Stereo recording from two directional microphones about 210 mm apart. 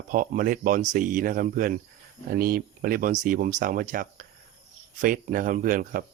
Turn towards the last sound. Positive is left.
turn(degrees=-40)  # may be behind; listen again after turning